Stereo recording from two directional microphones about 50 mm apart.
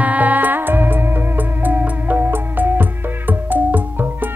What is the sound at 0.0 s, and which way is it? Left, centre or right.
Music, right.